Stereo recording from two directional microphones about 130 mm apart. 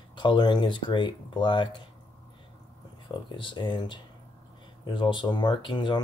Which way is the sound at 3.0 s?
40° left (ahead or behind).